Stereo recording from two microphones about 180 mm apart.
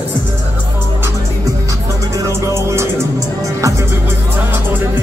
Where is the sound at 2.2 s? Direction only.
15° right (ahead or behind).